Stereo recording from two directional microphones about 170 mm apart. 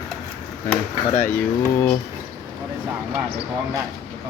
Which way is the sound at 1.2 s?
10° left (ahead or behind).